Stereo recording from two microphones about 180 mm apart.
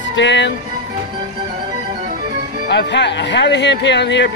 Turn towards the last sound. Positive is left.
turn(degrees=80)